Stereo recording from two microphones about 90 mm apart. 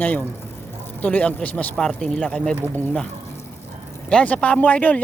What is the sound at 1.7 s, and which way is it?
Speech, 5° left (ahead or behind).